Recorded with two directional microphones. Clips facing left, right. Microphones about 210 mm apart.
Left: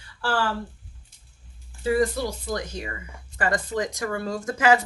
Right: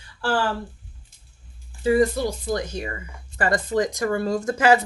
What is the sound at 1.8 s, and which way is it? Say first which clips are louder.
Speech: right 3 dB; 25° right (ahead or behind).